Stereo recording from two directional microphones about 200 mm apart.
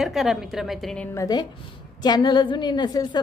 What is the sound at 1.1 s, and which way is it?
A woman's voice, 20° left (ahead or behind).